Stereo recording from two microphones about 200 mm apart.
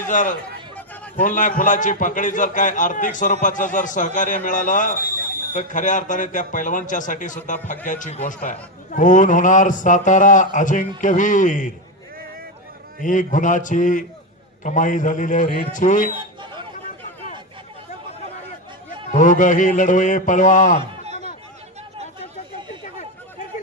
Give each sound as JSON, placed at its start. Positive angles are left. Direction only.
{"t": 0.1, "sound": "a man's voice", "side_deg": 40}
{"t": 13.0, "sound": "a man's voice", "side_deg": 40}
{"t": 19.1, "sound": "a man's voice", "side_deg": 40}
{"t": 21.0, "sound": "a sound", "side_deg": -35}